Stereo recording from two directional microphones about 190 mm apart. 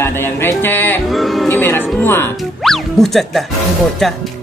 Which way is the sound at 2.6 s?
Centre (ahead or behind).